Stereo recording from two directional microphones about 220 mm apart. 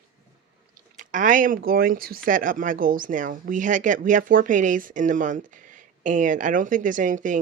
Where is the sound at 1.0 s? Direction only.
35° right (ahead or behind).